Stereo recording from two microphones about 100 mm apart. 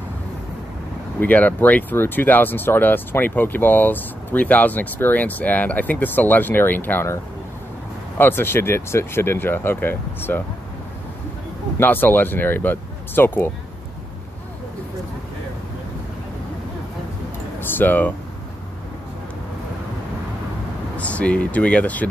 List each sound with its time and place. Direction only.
1.2 s speech: 15° left (ahead or behind)
8.2 s speech: 20° left (ahead or behind)
11.8 s speech: 20° left (ahead or behind)
17.6 s a sound: 20° left (ahead or behind)
20.9 s speech: 15° left (ahead or behind)